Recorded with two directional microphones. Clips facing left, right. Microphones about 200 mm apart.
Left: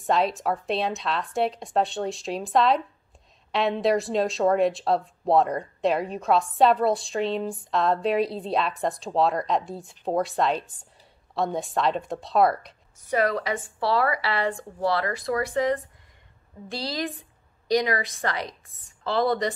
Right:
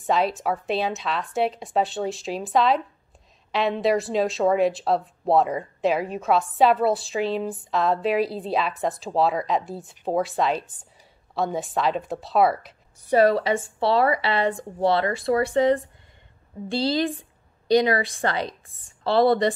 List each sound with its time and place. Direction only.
0.0 s a woman's voice: centre (ahead or behind)
13.1 s a woman's voice: 30° right (ahead or behind)